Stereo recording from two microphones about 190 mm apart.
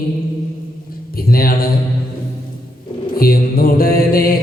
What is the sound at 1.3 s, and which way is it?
Mantra, 50° left (ahead or behind).